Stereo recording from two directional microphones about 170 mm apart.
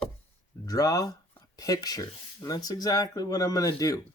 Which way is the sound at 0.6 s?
20° left (ahead or behind).